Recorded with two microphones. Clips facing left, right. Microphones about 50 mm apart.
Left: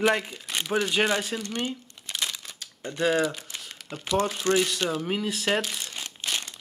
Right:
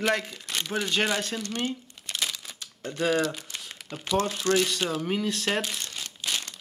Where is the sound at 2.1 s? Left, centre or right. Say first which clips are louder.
Even; centre.